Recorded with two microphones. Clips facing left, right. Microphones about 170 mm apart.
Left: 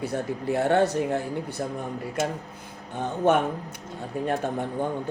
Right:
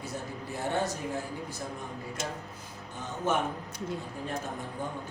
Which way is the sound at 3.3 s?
65° left (ahead or behind).